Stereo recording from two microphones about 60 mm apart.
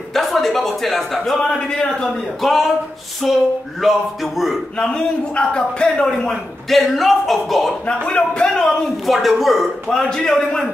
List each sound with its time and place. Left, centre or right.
0.1 s speech: centre
2.4 s speech: centre
4.7 s a man's voice: centre
6.7 s speech: centre
7.8 s speech: centre
8.6 s speech: centre
9.8 s a man's voice: centre